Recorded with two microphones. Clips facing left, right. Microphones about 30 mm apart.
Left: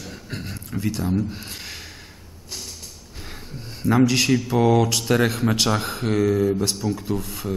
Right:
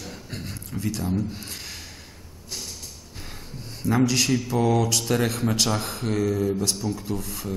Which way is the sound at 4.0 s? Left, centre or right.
Centre.